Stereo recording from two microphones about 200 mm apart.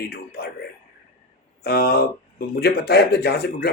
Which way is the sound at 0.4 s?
50° left (ahead or behind).